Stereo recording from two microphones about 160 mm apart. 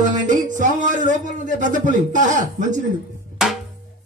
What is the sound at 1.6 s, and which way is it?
Speech, 50° right (ahead or behind).